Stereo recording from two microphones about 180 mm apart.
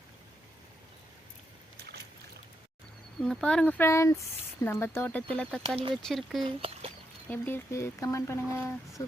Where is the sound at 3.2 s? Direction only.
5° left (ahead or behind).